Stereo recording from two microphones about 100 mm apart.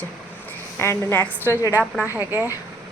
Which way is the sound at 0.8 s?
25° left (ahead or behind).